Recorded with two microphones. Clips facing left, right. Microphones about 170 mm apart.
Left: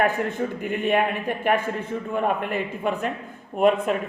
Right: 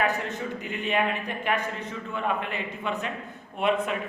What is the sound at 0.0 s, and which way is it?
Speech, 55° left (ahead or behind).